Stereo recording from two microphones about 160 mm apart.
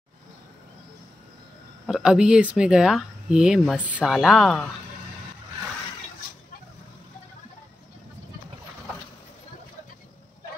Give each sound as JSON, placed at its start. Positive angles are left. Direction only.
{"t": 1.9, "sound": "speech", "side_deg": -5}